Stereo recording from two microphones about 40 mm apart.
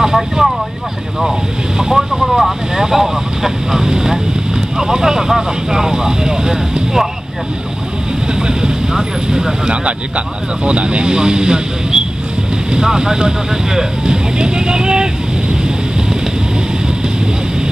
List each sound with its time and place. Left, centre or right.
0.0 s speech: centre
1.8 s speech: centre
2.1 s speech: centre
8.5 s speech: centre
9.7 s speech: right